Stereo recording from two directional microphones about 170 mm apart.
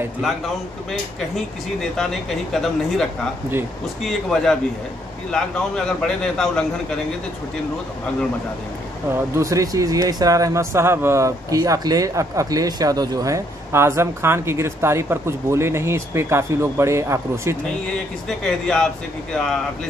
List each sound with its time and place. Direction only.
1.3 s speech: centre (ahead or behind)
9.3 s speech: 20° right (ahead or behind)
17.9 s speech: 5° left (ahead or behind)